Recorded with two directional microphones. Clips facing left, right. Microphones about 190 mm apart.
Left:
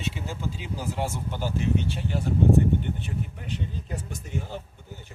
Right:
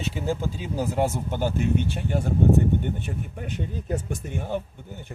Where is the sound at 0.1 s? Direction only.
45° right (ahead or behind).